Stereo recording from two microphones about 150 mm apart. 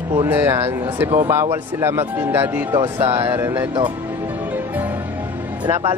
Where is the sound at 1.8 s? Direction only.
15° right (ahead or behind).